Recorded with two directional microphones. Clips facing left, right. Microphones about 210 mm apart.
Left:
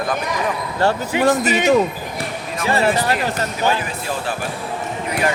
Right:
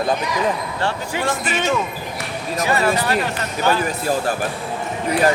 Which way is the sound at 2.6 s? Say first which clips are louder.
Left 2 dB; 30° left (ahead or behind).